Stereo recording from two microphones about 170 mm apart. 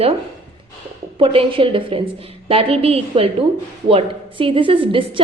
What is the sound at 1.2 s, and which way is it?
A woman's voice, 35° right (ahead or behind).